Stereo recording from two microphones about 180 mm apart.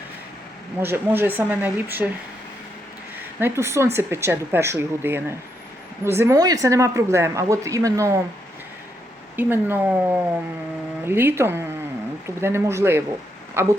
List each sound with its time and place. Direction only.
0.8 s speech: 10° right (ahead or behind)
3.4 s speech: 15° right (ahead or behind)
9.3 s speech: 10° right (ahead or behind)